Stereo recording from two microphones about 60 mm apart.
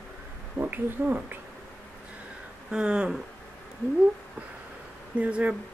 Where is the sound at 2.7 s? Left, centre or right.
Centre.